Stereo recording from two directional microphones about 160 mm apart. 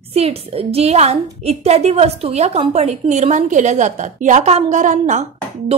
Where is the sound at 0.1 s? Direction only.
40° right (ahead or behind).